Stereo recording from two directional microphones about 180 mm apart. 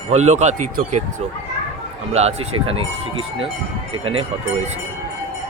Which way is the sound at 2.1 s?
35° right (ahead or behind).